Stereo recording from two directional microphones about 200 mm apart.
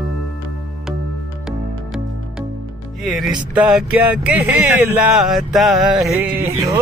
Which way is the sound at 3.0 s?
Centre (ahead or behind).